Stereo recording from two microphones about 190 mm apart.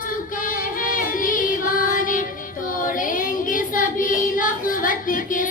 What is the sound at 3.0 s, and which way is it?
Child singing, 45° left (ahead or behind).